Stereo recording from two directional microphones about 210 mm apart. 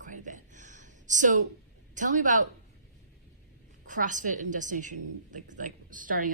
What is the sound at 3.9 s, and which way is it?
A woman's voice, 40° right (ahead or behind).